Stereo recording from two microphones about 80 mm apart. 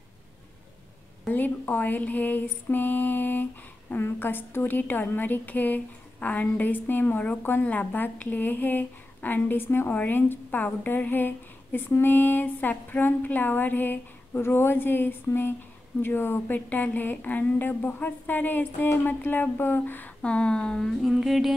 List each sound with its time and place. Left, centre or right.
1.3 s a woman's voice: left
20.2 s a sound: centre
21.0 s music: centre